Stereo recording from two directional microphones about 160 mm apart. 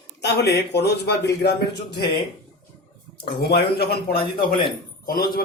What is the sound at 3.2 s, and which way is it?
Speech, 85° left.